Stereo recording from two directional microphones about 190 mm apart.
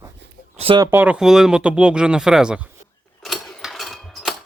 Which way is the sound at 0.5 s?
30° right (ahead or behind).